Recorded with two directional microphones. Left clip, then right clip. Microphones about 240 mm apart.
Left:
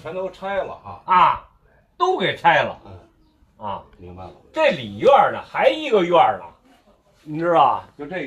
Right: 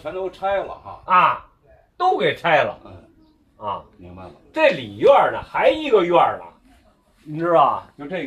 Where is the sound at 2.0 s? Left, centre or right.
Centre.